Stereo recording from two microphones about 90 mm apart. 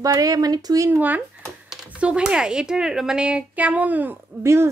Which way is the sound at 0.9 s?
20° right (ahead or behind).